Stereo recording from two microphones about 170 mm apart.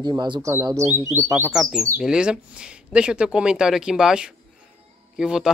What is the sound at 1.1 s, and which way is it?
Speech, 15° right (ahead or behind).